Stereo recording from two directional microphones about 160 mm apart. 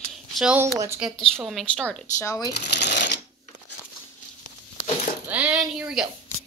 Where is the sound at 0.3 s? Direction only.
Centre (ahead or behind).